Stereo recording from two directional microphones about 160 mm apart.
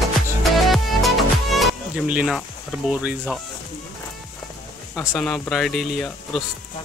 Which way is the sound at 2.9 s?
10° right (ahead or behind).